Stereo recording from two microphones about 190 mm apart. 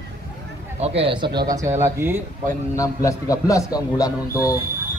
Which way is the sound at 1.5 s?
15° right (ahead or behind).